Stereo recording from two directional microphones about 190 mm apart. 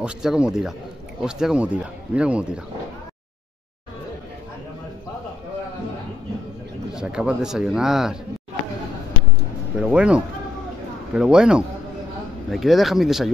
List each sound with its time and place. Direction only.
0.0 s speech: 5° right (ahead or behind)
6.9 s speech: 5° right (ahead or behind)
9.8 s speech: 5° right (ahead or behind)